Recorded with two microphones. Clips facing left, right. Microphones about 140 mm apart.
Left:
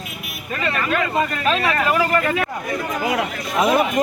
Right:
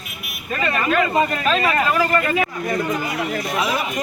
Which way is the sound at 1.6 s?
10° right (ahead or behind).